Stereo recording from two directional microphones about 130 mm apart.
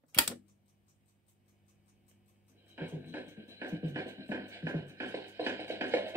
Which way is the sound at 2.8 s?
15° right (ahead or behind).